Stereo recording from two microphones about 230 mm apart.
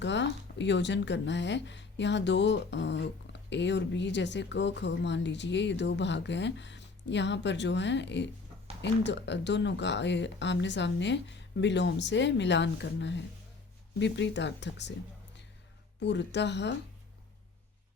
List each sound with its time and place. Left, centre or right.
0.0 s speech: left
16.0 s speech: left